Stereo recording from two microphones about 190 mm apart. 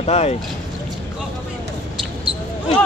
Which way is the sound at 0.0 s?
35° left (ahead or behind).